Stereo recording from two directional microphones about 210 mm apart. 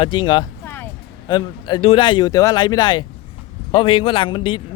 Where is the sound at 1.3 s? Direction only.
20° left (ahead or behind).